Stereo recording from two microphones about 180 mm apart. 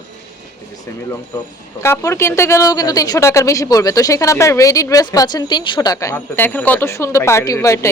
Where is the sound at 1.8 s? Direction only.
15° left (ahead or behind).